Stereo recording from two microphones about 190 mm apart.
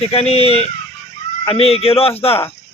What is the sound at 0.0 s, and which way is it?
Speech, 30° left (ahead or behind).